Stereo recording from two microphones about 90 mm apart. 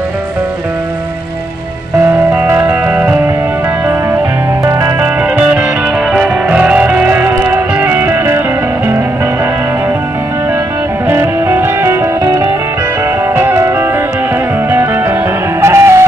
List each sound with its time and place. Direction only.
2.3 s music: 20° right (ahead or behind)
4.6 s music: 35° right (ahead or behind)
5.2 s music: 10° right (ahead or behind)
11.1 s music: 25° right (ahead or behind)